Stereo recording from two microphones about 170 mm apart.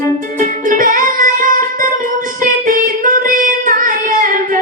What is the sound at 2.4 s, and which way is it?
Child singing, 50° right (ahead or behind).